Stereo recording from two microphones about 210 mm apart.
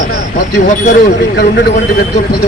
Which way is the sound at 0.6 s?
40° left (ahead or behind).